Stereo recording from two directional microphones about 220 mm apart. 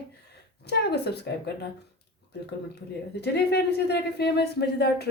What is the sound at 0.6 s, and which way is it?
Speech, 50° left (ahead or behind).